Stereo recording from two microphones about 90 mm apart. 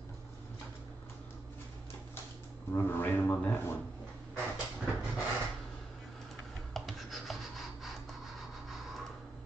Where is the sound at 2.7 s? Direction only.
25° left (ahead or behind).